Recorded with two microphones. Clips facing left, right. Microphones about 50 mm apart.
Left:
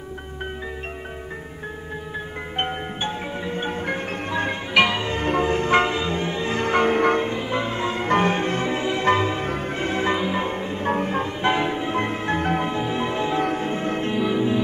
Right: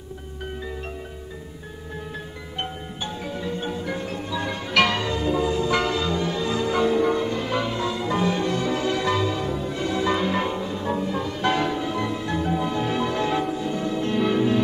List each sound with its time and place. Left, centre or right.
2.5 s marimba: left
4.7 s music: centre
5.2 s music: left
6.6 s music: left
7.3 s music: left
9.5 s change ringing: left
9.8 s music: left
10.1 s music: centre
10.4 s music: left
13.4 s change ringing: left
13.7 s change ringing: left
14.1 s music: centre